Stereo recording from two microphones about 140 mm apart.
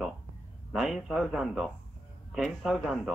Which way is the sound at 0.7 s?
Centre (ahead or behind).